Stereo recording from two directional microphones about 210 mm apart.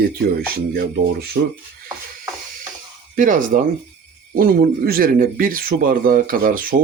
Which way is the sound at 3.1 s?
40° right (ahead or behind).